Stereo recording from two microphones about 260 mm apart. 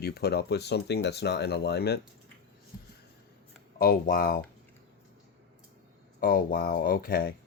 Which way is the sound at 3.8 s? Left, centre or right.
Left.